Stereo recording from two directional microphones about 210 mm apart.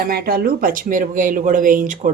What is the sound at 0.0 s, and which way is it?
A woman's voice, 45° right (ahead or behind).